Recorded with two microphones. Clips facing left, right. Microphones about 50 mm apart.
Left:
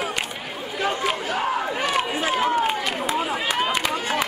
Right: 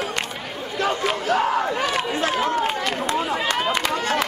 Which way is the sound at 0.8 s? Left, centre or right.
Centre.